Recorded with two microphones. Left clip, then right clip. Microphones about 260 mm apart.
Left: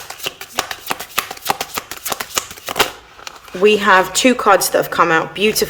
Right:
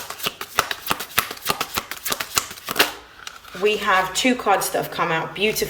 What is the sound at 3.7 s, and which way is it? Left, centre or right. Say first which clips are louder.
A woman's voice: left 7 dB; centre.